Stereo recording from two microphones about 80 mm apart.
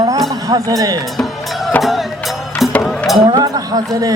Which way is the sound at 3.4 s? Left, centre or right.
Right.